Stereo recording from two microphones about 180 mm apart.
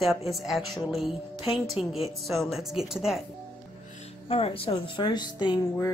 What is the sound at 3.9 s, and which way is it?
Speech, 35° left (ahead or behind).